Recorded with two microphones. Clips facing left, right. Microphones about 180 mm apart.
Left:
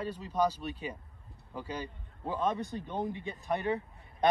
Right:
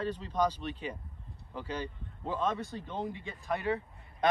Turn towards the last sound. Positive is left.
turn(degrees=20)  # may be behind; listen again after turning